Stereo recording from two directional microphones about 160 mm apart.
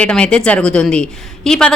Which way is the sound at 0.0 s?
5° left (ahead or behind).